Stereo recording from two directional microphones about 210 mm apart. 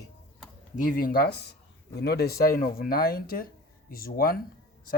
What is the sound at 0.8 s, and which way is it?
Speech, 40° left (ahead or behind).